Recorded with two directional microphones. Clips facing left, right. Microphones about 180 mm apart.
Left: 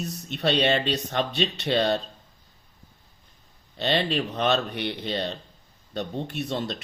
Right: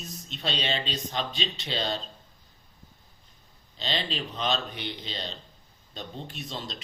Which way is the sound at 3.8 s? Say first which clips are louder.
Left 8 dB; 60° left (ahead or behind).